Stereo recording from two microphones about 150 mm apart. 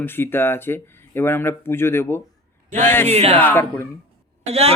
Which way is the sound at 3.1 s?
40° right (ahead or behind).